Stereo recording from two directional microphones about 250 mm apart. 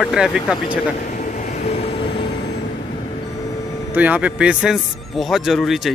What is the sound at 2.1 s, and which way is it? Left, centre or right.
Vehicle, left.